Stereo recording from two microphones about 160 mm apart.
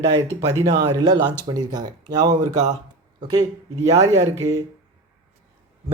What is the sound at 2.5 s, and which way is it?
Speech, 45° right (ahead or behind).